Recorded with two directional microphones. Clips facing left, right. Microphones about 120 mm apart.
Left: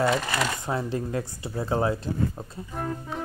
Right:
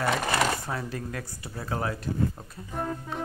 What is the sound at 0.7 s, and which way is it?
Speech, 25° left (ahead or behind).